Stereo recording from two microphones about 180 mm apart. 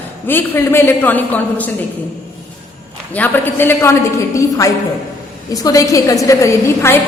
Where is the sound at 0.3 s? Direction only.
10° left (ahead or behind).